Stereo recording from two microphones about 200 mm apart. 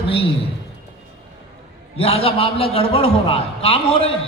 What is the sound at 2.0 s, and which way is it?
A man's voice, 30° left (ahead or behind).